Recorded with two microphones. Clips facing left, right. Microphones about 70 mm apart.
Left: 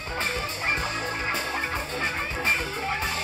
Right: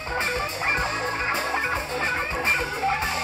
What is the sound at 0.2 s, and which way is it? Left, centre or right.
Music, right.